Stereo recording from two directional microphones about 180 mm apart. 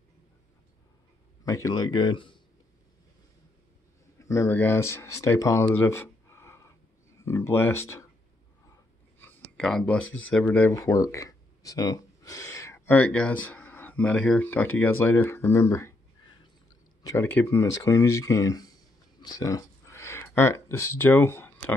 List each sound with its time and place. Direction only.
1.4 s speech: 20° left (ahead or behind)
4.2 s speech: 15° left (ahead or behind)
9.2 s a sound: 5° left (ahead or behind)
10.1 s speech: 10° left (ahead or behind)
17.0 s speech: 15° left (ahead or behind)
19.2 s a sound: 20° left (ahead or behind)